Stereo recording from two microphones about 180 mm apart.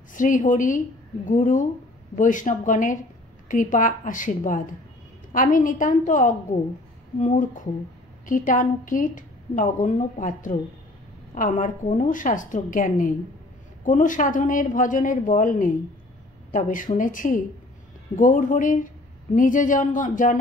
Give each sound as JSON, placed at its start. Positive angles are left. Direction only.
{"t": 0.1, "sound": "a woman's voice", "side_deg": 45}